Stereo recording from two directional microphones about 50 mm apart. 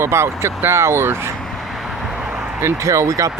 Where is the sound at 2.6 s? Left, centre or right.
Right.